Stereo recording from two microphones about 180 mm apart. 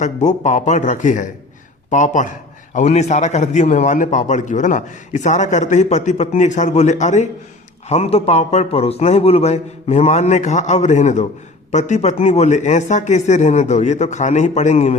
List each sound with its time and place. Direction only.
0.0 s a man's voice: 40° left (ahead or behind)